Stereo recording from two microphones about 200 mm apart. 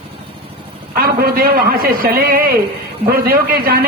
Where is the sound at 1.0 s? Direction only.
50° right (ahead or behind).